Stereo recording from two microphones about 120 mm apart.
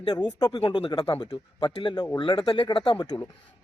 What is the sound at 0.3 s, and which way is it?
Speech, 35° left (ahead or behind).